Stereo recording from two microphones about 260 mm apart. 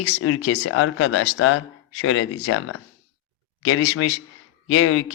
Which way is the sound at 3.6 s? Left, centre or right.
Left.